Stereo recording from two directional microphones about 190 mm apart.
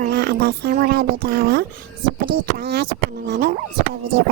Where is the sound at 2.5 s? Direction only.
60° right (ahead or behind).